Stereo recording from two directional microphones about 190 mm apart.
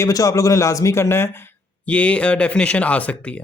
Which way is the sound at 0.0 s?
15° left (ahead or behind).